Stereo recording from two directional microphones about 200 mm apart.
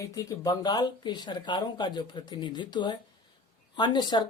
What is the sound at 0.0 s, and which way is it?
Speech, 15° left (ahead or behind).